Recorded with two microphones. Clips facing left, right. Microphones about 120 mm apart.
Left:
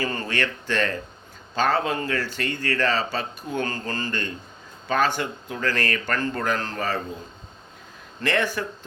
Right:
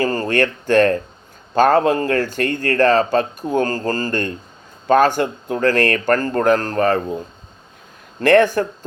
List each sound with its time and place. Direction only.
0.0 s speech: 40° right (ahead or behind)
8.2 s speech: 50° right (ahead or behind)